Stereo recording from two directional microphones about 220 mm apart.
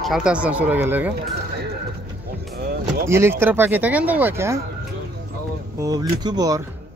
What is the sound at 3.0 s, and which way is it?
Speech, 10° right (ahead or behind).